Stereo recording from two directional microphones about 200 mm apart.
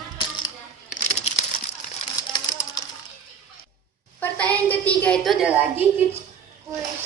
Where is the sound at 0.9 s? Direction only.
40° left (ahead or behind).